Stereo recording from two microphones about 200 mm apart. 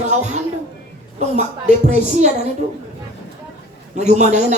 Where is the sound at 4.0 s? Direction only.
35° right (ahead or behind).